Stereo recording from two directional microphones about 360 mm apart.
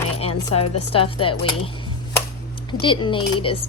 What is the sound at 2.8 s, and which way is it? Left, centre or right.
Speech, centre.